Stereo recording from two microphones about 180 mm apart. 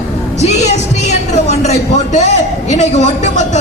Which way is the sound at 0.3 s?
40° left (ahead or behind).